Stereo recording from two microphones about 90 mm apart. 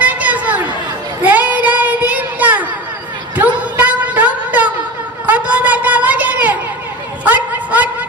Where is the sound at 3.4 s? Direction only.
20° right (ahead or behind).